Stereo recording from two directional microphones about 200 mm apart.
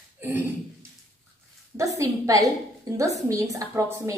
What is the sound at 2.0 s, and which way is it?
A woman's voice, 15° right (ahead or behind).